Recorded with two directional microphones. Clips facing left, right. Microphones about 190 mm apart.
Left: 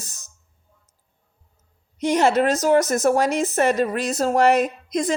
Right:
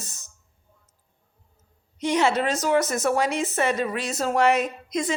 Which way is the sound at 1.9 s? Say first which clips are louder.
Left 4 dB; 45° left (ahead or behind).